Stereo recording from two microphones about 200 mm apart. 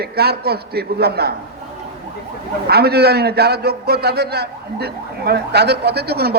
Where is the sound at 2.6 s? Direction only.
55° right (ahead or behind).